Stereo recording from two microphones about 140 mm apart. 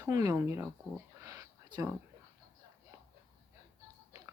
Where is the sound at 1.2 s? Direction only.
25° right (ahead or behind).